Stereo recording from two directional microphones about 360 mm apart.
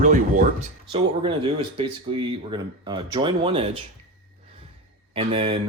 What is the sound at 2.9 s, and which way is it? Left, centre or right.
Speech, centre.